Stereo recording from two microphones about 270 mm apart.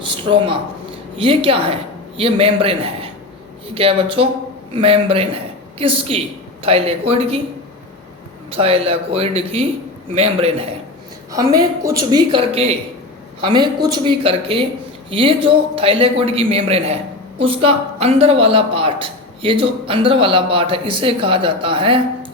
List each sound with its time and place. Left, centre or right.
0.0 s a woman's voice: centre
8.4 s a man's voice: right